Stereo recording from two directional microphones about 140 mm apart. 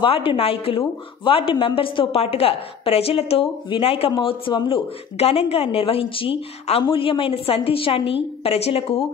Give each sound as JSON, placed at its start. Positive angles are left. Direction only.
{"t": 0.0, "sound": "a woman's voice", "side_deg": 40}